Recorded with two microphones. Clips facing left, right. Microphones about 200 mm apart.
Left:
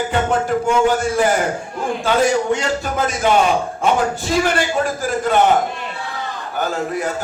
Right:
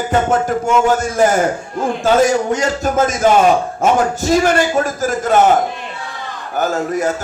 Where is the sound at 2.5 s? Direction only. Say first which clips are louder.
Right 4 dB; 45° right (ahead or behind).